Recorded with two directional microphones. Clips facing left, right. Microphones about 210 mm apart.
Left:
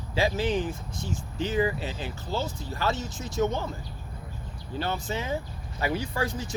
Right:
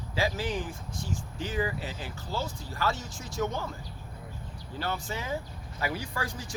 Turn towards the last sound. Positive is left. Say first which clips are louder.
# left 6 dB
turn(degrees=25)  # may be behind; listen again after turning